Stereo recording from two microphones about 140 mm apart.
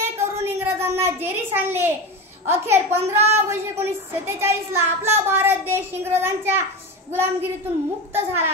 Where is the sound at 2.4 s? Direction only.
15° right (ahead or behind).